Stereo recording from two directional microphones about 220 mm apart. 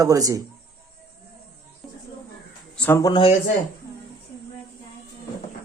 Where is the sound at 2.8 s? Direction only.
10° left (ahead or behind).